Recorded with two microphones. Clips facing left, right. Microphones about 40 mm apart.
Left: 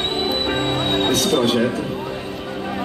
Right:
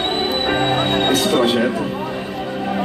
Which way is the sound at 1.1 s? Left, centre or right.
Centre.